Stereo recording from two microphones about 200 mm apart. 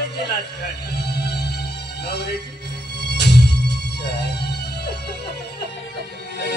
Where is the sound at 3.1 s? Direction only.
55° left (ahead or behind).